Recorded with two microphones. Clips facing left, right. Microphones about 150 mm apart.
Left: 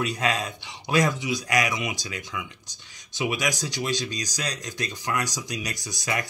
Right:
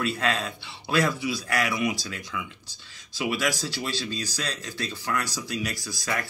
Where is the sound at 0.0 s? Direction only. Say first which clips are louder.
Left 1 dB; 15° left (ahead or behind).